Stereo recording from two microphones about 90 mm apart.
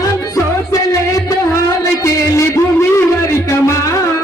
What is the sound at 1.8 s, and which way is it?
Music, 35° left (ahead or behind).